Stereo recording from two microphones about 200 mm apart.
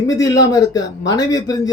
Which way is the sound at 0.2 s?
20° left (ahead or behind).